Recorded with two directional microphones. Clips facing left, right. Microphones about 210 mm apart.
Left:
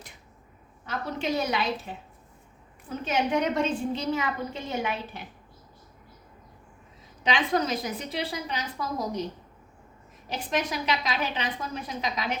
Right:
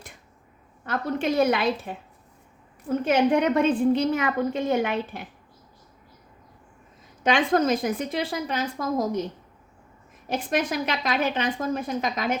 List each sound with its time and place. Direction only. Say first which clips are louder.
0.9 s a woman's voice: right 4 dB; 55° right (ahead or behind)
7.3 s a woman's voice: right 5 dB; 50° right (ahead or behind)
10.2 s a woman's voice: right 4 dB; 50° right (ahead or behind)